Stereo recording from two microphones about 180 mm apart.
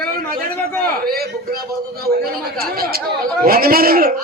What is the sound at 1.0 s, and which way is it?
Speech, 60° right (ahead or behind).